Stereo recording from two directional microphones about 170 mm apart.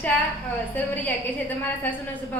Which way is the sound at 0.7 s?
10° left (ahead or behind).